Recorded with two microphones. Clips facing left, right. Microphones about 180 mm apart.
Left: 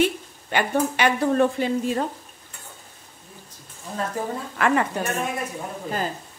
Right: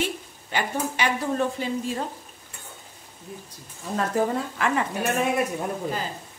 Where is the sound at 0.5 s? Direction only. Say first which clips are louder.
Left 5 dB; 60° left (ahead or behind).